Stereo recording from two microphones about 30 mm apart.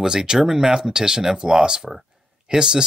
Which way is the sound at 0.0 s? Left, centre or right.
Right.